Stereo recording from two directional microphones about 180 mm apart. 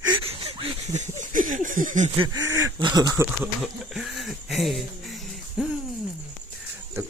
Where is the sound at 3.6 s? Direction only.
Centre (ahead or behind).